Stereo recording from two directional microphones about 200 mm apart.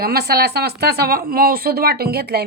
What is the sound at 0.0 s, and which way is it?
Speech, 50° right (ahead or behind).